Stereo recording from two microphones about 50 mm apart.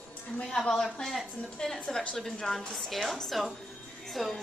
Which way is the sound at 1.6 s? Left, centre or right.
Centre.